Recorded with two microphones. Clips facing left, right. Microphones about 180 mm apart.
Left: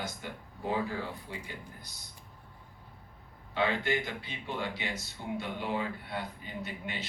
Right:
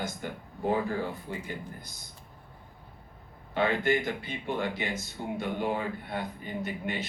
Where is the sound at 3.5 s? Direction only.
50° right (ahead or behind).